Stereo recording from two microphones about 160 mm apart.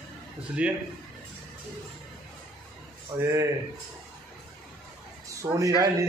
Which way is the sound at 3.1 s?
15° right (ahead or behind).